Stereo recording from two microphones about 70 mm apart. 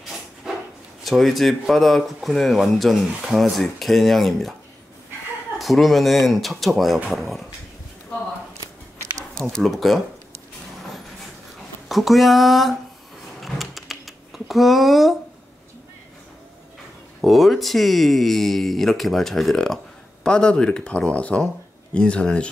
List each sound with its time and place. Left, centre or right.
1.0 s speech: centre
5.6 s speech: centre
9.0 s a sound: right
9.4 s speech: centre
11.9 s speech: centre
13.4 s a sound: centre
17.2 s speech: centre